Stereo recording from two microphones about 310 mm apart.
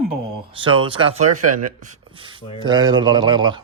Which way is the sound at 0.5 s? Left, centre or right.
Centre.